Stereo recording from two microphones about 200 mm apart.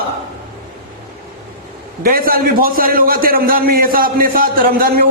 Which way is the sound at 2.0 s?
45° right (ahead or behind).